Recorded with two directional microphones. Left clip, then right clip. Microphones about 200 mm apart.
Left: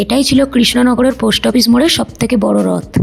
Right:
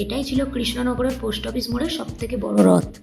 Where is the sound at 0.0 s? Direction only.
55° left (ahead or behind).